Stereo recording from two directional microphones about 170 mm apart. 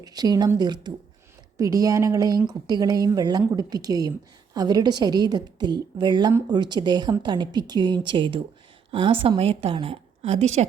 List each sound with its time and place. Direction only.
0.0 s a woman's voice: 25° right (ahead or behind); by 10.7 s 40° right (ahead or behind)